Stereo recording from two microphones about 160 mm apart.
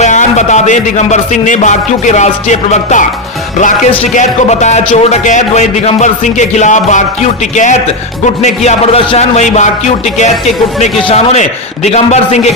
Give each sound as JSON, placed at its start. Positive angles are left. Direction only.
{"t": 0.0, "sound": "a man's voice", "side_deg": 50}
{"t": 4.1, "sound": "a man's voice", "side_deg": 50}